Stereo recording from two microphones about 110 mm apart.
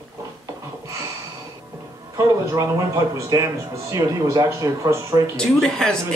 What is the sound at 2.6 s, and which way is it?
A man's voice, 30° right (ahead or behind).